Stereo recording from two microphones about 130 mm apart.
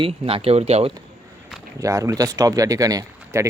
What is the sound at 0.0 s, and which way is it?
Speech, 45° right (ahead or behind).